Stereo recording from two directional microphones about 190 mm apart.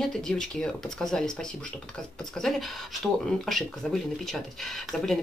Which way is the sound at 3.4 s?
Centre (ahead or behind).